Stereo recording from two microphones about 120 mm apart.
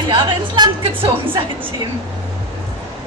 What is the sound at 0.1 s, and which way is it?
Speech, 40° right (ahead or behind).